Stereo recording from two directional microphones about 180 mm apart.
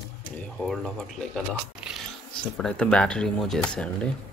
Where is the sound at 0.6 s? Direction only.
Centre (ahead or behind).